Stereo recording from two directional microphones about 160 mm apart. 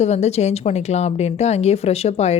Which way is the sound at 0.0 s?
45° left (ahead or behind).